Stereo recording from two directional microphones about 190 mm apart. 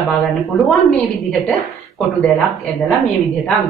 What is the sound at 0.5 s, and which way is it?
A woman's voice, centre (ahead or behind).